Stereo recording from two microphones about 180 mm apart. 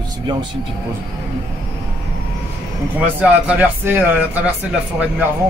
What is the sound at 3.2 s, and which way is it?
Speech, 10° right (ahead or behind).